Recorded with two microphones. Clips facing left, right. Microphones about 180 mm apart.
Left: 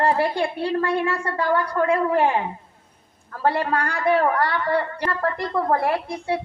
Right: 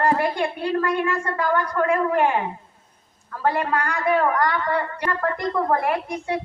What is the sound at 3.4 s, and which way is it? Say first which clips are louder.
A woman's voice: left 1 dB; 30° left (ahead or behind).